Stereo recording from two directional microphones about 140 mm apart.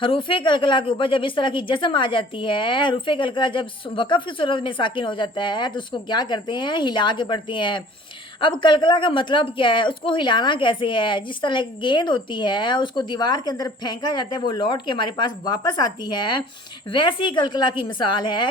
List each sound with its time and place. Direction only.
0.0 s a woman's voice: 35° left (ahead or behind)